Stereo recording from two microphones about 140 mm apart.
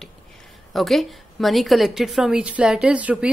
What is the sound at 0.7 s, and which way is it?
A woman's voice, centre (ahead or behind).